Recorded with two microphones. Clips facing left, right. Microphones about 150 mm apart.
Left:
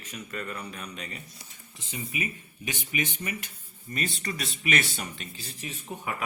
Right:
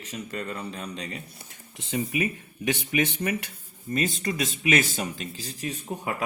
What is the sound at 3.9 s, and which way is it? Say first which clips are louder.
Speech: right 6 dB; 45° right (ahead or behind).